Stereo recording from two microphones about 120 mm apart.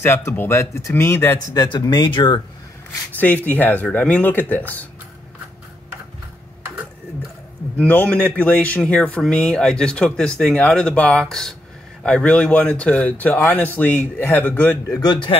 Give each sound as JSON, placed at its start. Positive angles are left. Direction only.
{"t": 0.0, "sound": "speech", "side_deg": 20}
{"t": 3.1, "sound": "speech", "side_deg": 15}
{"t": 7.8, "sound": "speech", "side_deg": 10}